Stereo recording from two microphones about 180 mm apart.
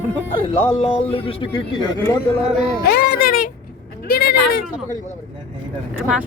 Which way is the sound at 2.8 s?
60° left (ahead or behind).